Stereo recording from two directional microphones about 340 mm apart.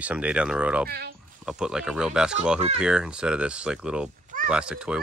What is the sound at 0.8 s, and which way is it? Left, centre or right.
Speech, right.